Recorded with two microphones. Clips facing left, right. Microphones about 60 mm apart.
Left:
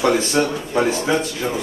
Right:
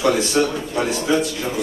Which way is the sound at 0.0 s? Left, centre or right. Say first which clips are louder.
Even; left.